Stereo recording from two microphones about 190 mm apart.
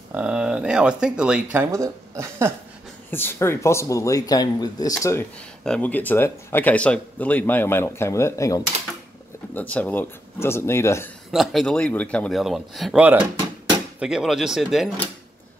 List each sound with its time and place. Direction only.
0.1 s speech: 5° right (ahead or behind)
3.1 s speech: 10° left (ahead or behind)
11.3 s speech: centre (ahead or behind)